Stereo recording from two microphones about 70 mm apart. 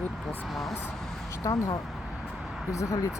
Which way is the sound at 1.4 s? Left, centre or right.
Left.